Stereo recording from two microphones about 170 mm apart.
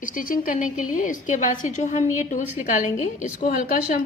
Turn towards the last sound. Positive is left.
turn(degrees=55)  # may be behind; listen again after turning